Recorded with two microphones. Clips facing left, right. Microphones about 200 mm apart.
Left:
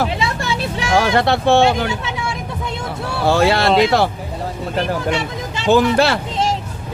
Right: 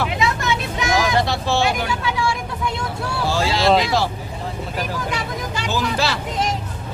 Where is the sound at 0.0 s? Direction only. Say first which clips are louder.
Left 1 dB; 30° left (ahead or behind).